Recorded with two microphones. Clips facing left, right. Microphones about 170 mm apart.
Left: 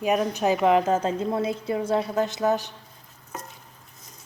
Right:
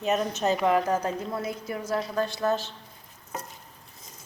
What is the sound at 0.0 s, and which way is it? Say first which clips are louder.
A woman's voice: left 3 dB; 10° left (ahead or behind).